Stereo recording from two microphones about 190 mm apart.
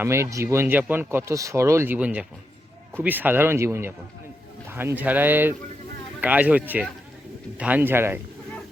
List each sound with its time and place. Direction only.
0.0 s speech: 15° right (ahead or behind)